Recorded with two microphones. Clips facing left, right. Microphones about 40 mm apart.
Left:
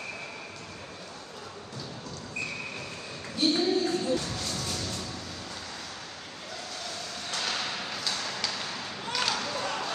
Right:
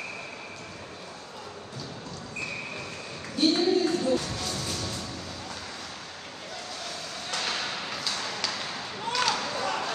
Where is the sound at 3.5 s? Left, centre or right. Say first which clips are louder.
Right 1 dB; right.